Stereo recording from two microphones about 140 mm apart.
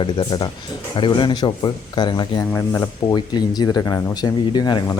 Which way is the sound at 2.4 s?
20° left (ahead or behind).